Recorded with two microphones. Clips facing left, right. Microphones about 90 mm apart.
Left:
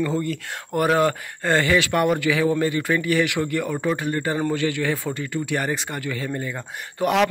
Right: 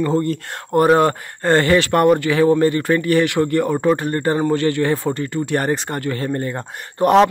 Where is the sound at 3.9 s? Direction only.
40° right (ahead or behind).